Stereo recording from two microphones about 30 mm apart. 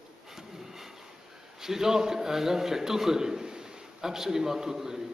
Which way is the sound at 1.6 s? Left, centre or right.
Centre.